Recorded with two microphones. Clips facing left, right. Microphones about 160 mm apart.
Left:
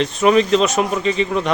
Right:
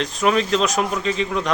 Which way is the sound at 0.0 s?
Centre (ahead or behind).